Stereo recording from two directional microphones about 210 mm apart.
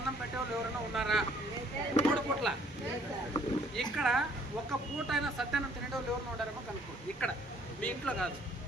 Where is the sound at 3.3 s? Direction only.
25° left (ahead or behind).